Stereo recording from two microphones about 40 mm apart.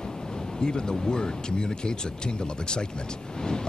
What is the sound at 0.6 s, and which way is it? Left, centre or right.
Speech, left.